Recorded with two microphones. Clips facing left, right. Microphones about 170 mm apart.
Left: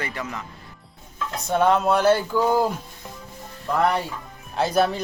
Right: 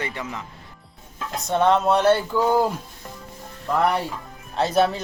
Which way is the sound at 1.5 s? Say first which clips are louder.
Right 1 dB; 5° left (ahead or behind).